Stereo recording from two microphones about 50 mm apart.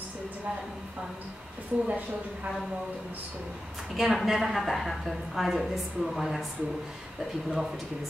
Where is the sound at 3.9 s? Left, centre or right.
Centre.